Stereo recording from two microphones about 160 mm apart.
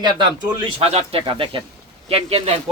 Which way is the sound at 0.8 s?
40° right (ahead or behind).